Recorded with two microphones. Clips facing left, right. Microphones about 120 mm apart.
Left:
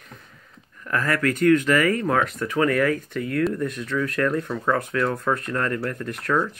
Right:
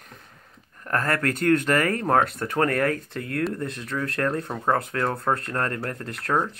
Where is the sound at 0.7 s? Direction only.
45° right (ahead or behind).